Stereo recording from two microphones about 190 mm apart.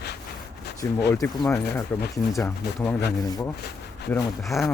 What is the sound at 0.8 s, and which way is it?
Speech, 15° left (ahead or behind).